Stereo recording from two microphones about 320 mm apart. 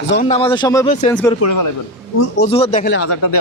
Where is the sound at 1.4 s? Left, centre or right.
Left.